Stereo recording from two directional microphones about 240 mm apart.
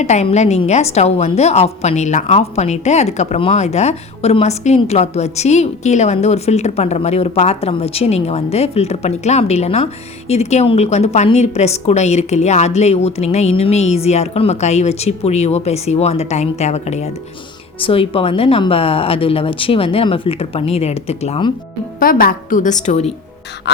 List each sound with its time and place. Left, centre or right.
0.0 s a woman's voice: left
22.0 s a woman's voice: left